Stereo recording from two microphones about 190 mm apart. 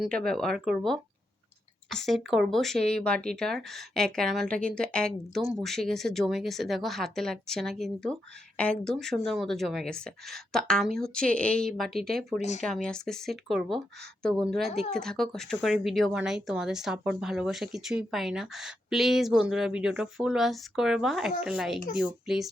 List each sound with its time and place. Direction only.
0.0 s speech: 5° left (ahead or behind)
2.0 s speech: centre (ahead or behind)
12.4 s speech: 35° left (ahead or behind)
12.6 s speech: 5° left (ahead or behind)
14.7 s speech: 35° left (ahead or behind)
14.9 s speech: centre (ahead or behind)